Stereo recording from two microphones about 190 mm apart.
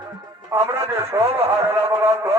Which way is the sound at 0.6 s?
15° right (ahead or behind).